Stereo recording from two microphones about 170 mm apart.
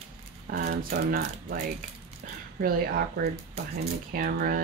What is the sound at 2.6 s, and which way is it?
Speech, 60° right (ahead or behind).